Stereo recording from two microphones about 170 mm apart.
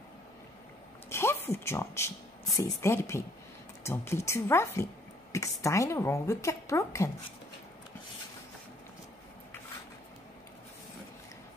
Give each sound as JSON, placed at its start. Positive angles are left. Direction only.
{"t": 1.1, "sound": "speech", "side_deg": 15}